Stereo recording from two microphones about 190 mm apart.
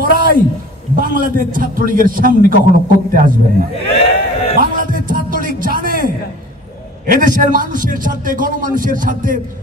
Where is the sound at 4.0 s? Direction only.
30° left (ahead or behind).